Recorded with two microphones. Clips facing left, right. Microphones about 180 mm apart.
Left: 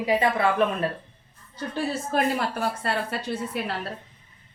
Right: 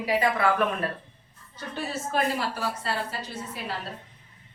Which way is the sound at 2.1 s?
55° left (ahead or behind).